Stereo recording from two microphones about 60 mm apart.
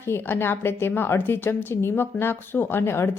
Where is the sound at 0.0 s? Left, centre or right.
Left.